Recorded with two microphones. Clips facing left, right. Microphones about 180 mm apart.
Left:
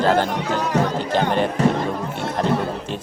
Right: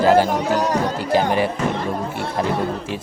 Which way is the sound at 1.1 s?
10° right (ahead or behind).